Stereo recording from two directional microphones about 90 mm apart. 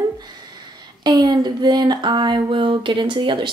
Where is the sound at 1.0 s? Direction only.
50° right (ahead or behind).